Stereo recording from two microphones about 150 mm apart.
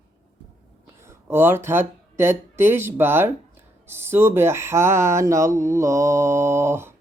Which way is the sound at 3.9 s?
15° right (ahead or behind).